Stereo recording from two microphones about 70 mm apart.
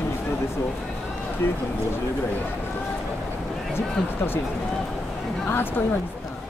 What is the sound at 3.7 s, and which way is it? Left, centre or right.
Speech, left.